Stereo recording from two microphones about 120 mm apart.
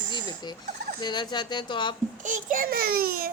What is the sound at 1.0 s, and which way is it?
Speech, 40° left (ahead or behind).